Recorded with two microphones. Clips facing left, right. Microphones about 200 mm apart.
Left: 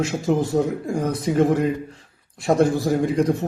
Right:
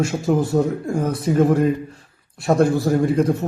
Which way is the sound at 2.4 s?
20° left (ahead or behind).